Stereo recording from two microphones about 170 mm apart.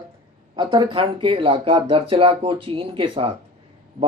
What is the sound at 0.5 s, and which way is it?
Speech, 25° right (ahead or behind).